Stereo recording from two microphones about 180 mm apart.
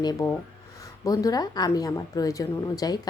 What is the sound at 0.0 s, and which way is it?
A woman's voice, 20° left (ahead or behind).